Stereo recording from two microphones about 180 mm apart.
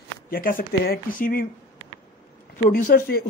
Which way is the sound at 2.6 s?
50° left (ahead or behind).